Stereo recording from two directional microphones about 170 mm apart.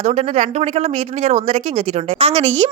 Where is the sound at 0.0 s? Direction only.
40° right (ahead or behind).